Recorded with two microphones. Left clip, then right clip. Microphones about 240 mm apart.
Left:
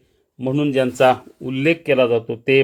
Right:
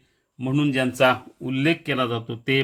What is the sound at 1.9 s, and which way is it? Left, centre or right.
Speech, right.